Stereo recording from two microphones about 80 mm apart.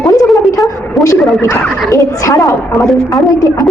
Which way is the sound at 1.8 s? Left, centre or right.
Left.